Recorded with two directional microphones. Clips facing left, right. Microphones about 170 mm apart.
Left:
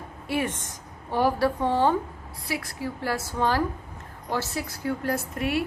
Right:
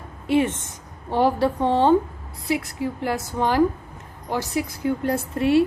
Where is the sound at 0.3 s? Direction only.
25° right (ahead or behind).